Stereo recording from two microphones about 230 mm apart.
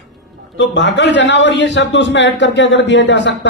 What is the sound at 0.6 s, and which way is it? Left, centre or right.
A man's voice, left.